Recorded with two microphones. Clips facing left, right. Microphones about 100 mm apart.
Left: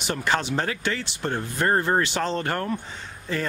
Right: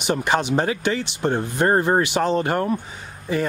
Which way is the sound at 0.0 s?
15° right (ahead or behind).